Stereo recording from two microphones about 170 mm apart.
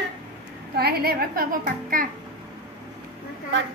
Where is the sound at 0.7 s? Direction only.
65° right (ahead or behind).